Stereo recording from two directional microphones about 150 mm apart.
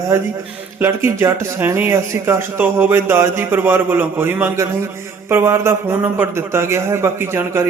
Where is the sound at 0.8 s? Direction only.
15° right (ahead or behind).